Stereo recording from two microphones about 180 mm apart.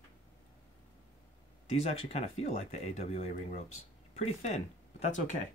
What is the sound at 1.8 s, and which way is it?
Speech, 35° left (ahead or behind).